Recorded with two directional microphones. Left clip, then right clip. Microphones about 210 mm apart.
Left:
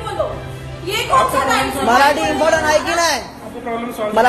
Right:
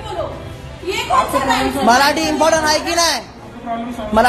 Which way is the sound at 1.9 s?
40° right (ahead or behind).